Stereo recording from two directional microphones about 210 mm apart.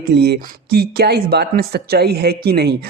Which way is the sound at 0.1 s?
50° right (ahead or behind).